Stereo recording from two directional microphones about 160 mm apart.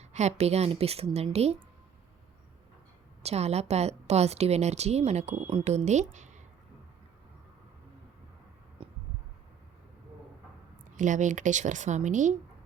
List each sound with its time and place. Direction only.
0.0 s a woman's voice: 45° right (ahead or behind)
3.2 s a woman's voice: 40° right (ahead or behind)
8.8 s a sound: 35° right (ahead or behind)
10.9 s a woman's voice: 50° right (ahead or behind)